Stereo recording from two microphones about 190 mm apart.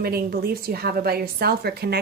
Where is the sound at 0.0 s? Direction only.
55° right (ahead or behind).